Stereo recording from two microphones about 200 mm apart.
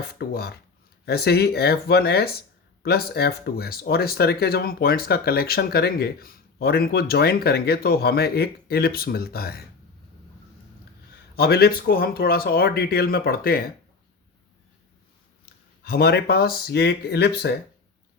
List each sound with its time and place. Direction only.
0.1 s speech: 50° left (ahead or behind)
11.3 s speech: 50° left (ahead or behind)
15.8 s speech: 50° left (ahead or behind)